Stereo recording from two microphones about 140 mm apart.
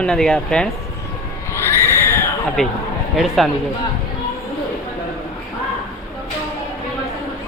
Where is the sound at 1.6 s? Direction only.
20° left (ahead or behind).